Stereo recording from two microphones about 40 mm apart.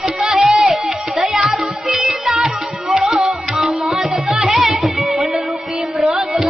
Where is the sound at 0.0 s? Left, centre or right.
Centre.